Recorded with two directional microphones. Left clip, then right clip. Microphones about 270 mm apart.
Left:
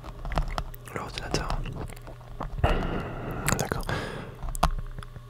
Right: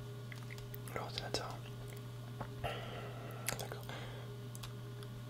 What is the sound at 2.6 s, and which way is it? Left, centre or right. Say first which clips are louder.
Chewing: left 15 dB; left.